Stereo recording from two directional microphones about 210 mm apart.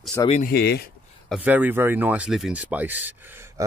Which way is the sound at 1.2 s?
5° right (ahead or behind).